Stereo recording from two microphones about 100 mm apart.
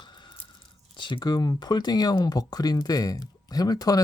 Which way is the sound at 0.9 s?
50° left (ahead or behind).